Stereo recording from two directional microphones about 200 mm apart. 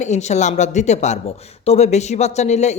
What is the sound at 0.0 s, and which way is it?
Speech, 35° left (ahead or behind).